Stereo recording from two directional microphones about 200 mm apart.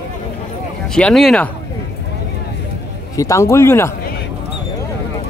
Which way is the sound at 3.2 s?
15° left (ahead or behind).